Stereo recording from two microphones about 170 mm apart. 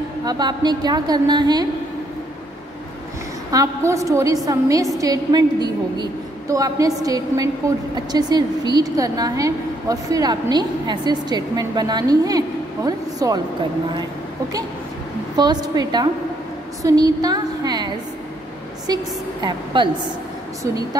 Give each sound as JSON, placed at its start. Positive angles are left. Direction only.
{"t": 0.2, "sound": "a woman's voice", "side_deg": -25}
{"t": 3.5, "sound": "a woman's voice", "side_deg": -20}
{"t": 15.3, "sound": "a woman's voice", "side_deg": -25}
{"t": 16.8, "sound": "a sound", "side_deg": -20}
{"t": 19.4, "sound": "a woman's voice", "side_deg": -25}